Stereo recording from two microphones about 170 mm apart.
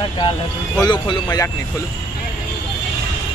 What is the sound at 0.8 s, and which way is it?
Speech, 25° left (ahead or behind).